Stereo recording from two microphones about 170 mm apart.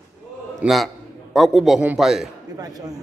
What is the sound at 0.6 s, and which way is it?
A man's voice, centre (ahead or behind).